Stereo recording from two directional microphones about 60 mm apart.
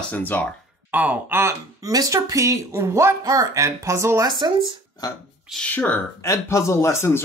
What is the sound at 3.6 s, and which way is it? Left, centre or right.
Speech, right.